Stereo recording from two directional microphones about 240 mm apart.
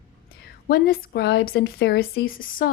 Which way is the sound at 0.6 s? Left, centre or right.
Left.